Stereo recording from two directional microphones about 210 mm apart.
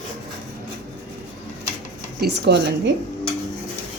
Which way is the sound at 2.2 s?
50° right (ahead or behind).